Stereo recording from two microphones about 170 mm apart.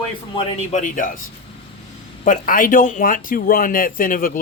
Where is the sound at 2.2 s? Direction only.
50° left (ahead or behind).